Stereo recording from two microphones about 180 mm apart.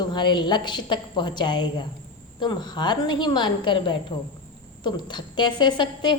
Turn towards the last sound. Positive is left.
turn(degrees=25)  # may be behind; listen again after turning